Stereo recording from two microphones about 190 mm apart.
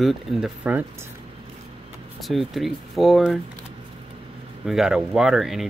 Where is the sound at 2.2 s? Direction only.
Centre (ahead or behind).